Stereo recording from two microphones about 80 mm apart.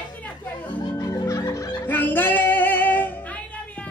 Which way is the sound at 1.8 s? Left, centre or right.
Left.